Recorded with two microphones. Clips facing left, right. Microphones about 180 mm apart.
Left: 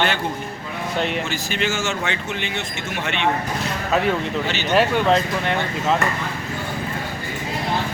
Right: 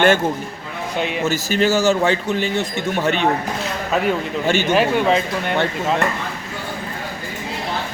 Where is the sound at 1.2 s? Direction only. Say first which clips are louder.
Right 6 dB; 40° right (ahead or behind).